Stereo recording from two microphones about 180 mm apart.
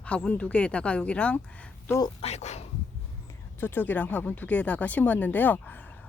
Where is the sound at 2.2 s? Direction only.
40° left (ahead or behind).